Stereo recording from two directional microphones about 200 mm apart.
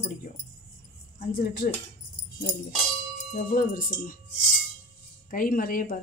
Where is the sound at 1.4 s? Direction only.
55° left (ahead or behind).